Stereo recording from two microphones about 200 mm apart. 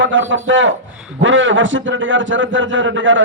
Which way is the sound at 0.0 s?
65° right (ahead or behind).